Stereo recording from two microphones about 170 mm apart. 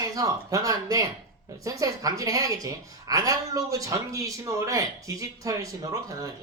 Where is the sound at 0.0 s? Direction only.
20° right (ahead or behind).